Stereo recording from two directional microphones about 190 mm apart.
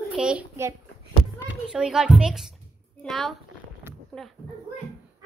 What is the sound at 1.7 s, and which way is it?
A child's voice, 5° right (ahead or behind).